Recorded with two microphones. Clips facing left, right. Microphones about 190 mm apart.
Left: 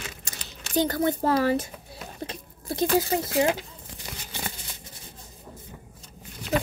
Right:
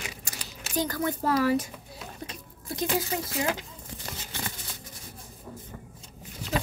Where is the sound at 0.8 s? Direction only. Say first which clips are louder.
Left 5 dB; 30° left (ahead or behind).